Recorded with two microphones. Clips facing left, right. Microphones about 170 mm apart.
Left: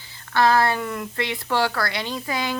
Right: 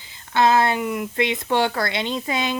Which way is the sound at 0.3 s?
20° right (ahead or behind).